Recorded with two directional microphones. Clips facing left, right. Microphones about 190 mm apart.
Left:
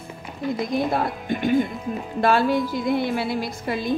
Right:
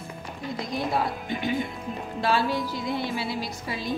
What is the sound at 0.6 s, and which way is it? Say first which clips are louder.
A woman's voice: left 2 dB; 55° left (ahead or behind).